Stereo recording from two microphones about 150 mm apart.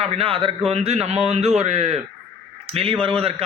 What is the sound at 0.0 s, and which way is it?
A man's voice, 40° right (ahead or behind).